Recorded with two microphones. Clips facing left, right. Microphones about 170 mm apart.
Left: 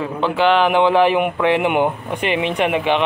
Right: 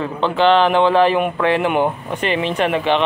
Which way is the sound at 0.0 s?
10° left (ahead or behind).